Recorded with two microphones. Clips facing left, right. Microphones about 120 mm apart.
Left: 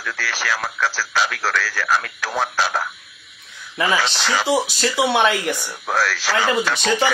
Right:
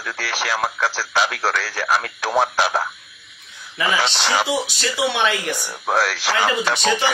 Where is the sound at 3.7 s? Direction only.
40° left (ahead or behind).